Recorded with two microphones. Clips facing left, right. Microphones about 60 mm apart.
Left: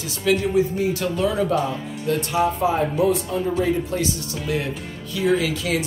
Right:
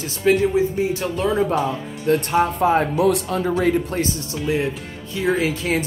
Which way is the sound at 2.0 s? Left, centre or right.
Right.